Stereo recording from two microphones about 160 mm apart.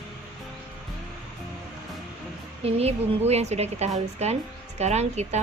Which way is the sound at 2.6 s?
40° right (ahead or behind).